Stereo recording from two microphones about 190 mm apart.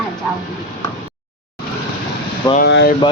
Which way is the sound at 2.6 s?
60° left (ahead or behind).